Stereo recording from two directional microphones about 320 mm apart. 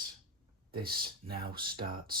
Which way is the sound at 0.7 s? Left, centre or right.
Right.